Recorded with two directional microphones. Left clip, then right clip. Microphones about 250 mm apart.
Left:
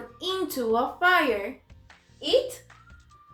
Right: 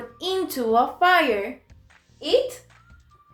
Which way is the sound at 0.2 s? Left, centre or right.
Centre.